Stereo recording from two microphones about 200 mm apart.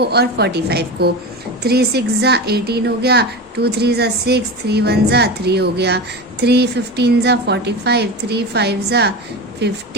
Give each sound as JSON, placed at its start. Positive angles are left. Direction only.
{"t": 0.0, "sound": "a woman's voice", "side_deg": -55}